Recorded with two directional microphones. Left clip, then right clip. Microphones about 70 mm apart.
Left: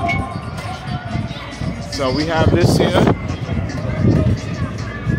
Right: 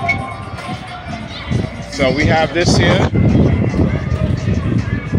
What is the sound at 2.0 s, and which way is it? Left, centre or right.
Speech, left.